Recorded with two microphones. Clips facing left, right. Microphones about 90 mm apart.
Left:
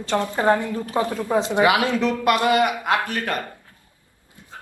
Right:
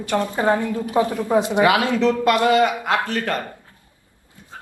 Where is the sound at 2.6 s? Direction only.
25° right (ahead or behind).